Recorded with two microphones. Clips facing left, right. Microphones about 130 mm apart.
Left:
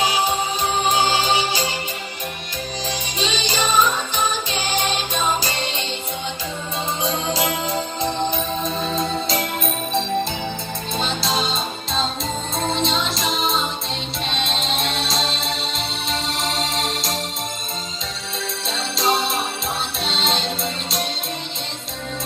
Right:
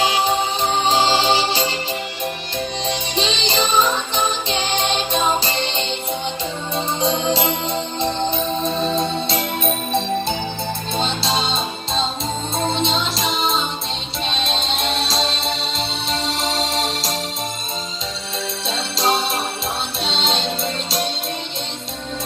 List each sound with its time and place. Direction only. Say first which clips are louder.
0.9 s music: right 3 dB; 30° right (ahead or behind)
2.8 s music: right 2 dB; 30° right (ahead or behind)
8.6 s music: right 4 dB; 30° right (ahead or behind)
10.9 s music: right 1 dB; centre (ahead or behind)
18.7 s music: right 1 dB; centre (ahead or behind)